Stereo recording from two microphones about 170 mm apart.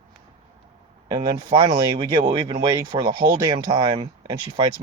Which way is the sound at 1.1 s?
25° right (ahead or behind).